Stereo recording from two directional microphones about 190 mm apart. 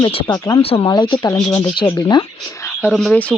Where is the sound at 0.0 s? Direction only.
25° left (ahead or behind).